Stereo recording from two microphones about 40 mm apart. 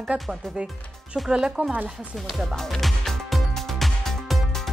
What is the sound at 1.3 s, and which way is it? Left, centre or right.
Speech, centre.